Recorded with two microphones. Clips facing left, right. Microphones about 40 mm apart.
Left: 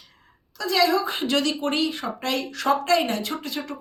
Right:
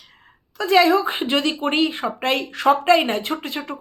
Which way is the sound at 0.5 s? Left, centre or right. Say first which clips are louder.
Right 6 dB; right.